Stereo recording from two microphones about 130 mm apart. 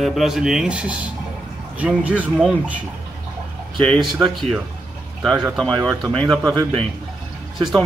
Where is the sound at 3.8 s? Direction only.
5° left (ahead or behind).